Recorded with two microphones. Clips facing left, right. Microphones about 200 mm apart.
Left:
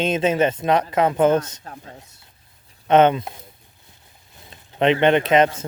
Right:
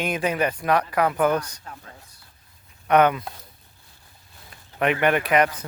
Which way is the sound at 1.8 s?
25° left (ahead or behind).